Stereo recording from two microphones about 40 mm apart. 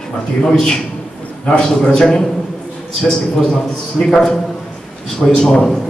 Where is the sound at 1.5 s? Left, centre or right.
Centre.